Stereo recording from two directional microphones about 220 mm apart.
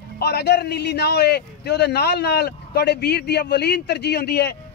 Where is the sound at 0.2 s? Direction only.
50° left (ahead or behind).